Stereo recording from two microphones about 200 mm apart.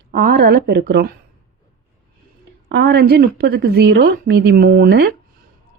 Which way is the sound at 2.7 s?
50° right (ahead or behind).